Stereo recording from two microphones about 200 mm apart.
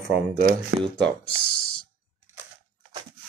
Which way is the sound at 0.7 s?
65° right (ahead or behind).